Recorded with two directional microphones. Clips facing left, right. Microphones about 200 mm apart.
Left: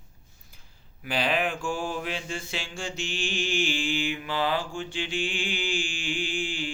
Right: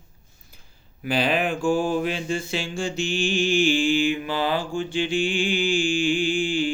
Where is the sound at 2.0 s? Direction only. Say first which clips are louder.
Right 7 dB; 40° right (ahead or behind).